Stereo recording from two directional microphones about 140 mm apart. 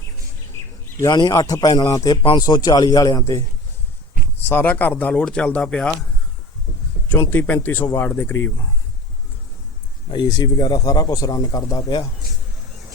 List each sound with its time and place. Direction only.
1.0 s a man's voice: 25° left (ahead or behind); by 5.9 s 10° left (ahead or behind)
7.1 s speech: 15° left (ahead or behind)
10.1 s a man's voice: 30° left (ahead or behind)